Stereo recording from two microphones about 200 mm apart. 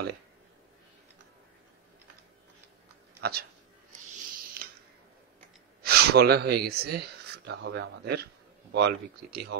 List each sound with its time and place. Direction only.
3.2 s speech: 50° right (ahead or behind)
5.8 s speech: 50° right (ahead or behind)